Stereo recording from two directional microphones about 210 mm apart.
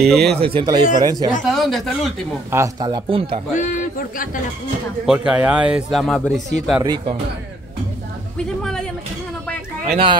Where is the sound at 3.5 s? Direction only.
35° left (ahead or behind).